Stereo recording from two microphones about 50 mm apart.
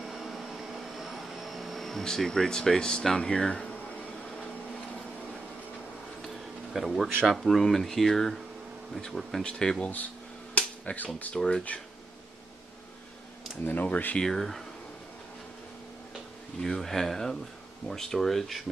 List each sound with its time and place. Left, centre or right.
0.0 s vacuum cleaner: centre
6.2 s insect: centre
7.2 s speech: centre
10.5 s a sound: left
11.3 s speech: centre
13.7 s speech: left
14.2 s speech: centre
16.6 s speech: centre